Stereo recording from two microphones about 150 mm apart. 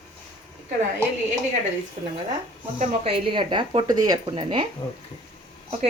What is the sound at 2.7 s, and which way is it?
Speech, 45° right (ahead or behind).